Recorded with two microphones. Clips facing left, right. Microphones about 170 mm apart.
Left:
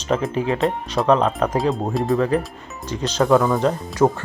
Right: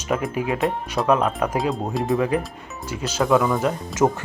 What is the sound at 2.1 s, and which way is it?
Speech, 10° right (ahead or behind).